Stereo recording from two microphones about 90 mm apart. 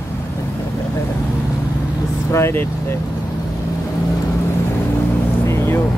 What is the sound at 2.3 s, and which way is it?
Speech, 30° left (ahead or behind).